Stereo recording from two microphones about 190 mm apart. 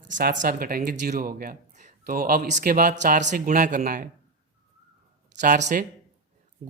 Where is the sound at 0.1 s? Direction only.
45° right (ahead or behind).